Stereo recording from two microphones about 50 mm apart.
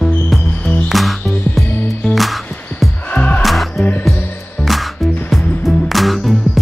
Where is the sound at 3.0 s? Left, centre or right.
Left.